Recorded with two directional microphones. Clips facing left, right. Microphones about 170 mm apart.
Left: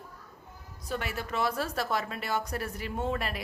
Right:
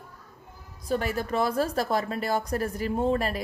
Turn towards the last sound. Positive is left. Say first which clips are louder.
# right 7 dB
turn(degrees=-40)  # may be behind; listen again after turning